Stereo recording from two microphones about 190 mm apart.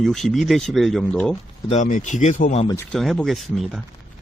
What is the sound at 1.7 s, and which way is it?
Speech, 40° left (ahead or behind).